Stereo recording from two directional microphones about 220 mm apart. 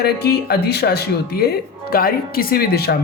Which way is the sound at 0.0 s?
45° left (ahead or behind).